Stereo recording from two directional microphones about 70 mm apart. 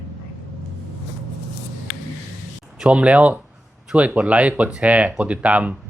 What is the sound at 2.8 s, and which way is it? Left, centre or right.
Speech, centre.